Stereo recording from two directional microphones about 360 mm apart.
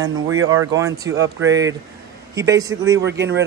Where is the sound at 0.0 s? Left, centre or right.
Right.